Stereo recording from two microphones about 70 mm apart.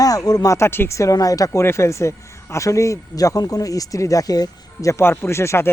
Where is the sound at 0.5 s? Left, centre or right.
Left.